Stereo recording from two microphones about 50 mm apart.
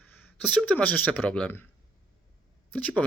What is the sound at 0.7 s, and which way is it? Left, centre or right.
Speech, left.